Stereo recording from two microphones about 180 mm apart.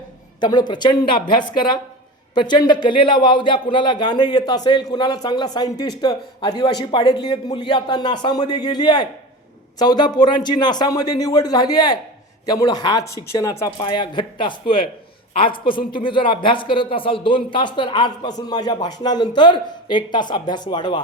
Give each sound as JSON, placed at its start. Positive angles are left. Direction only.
{"t": 0.3, "sound": "a woman's voice", "side_deg": 25}